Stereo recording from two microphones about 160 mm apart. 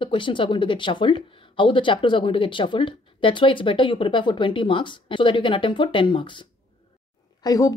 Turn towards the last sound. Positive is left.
turn(degrees=20)  # may be behind; listen again after turning